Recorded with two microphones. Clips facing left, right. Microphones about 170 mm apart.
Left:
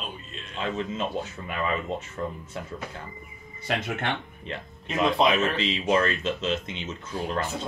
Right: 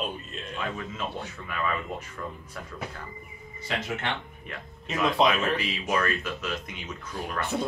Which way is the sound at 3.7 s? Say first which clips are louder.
Left 3 dB; 60° left (ahead or behind).